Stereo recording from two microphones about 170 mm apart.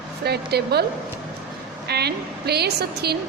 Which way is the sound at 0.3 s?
70° right (ahead or behind).